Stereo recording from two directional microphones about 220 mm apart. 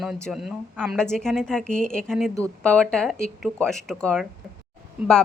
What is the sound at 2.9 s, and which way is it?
A woman's voice, 5° left (ahead or behind).